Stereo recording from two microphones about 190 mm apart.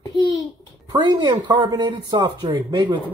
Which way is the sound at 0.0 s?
20° left (ahead or behind).